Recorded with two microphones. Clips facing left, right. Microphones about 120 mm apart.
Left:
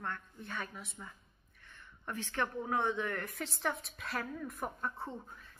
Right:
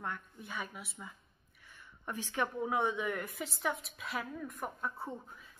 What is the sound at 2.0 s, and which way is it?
A woman's voice, 15° right (ahead or behind).